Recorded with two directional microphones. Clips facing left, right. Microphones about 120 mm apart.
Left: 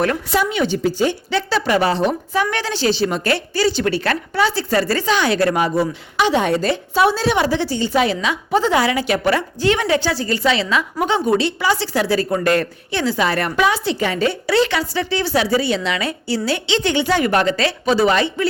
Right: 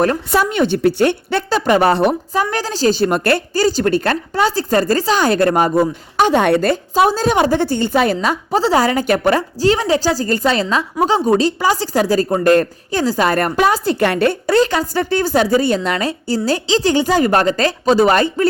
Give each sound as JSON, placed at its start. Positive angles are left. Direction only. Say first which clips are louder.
{"t": 0.3, "sound": "a woman's voice", "louder": "right 3 dB", "side_deg": -50}
{"t": 2.3, "sound": "a woman's voice", "louder": "right 1 dB", "side_deg": -40}
{"t": 6.9, "sound": "a woman's voice", "louder": "right 2 dB", "side_deg": -40}
{"t": 14.0, "sound": "a woman's voice", "louder": "right 4 dB", "side_deg": -60}